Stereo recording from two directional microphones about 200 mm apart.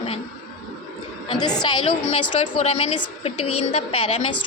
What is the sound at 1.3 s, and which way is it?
Speech, 20° left (ahead or behind).